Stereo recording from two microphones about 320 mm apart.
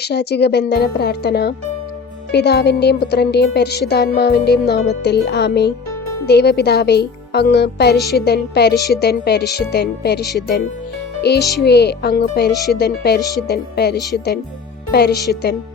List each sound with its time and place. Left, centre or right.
0.0 s speech: left
7.9 s speech: centre
8.2 s speech: left
11.3 s speech: left